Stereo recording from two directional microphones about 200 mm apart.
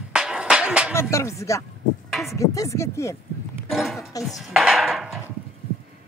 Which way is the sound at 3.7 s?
Centre (ahead or behind).